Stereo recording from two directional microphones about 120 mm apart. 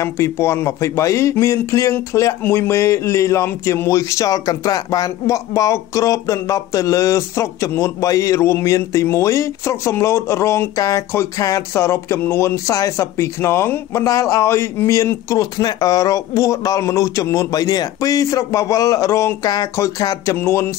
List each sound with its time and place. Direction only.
0.0 s a man's voice: 25° left (ahead or behind)